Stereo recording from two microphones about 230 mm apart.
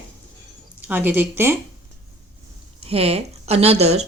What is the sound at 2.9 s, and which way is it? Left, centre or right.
Speech, right.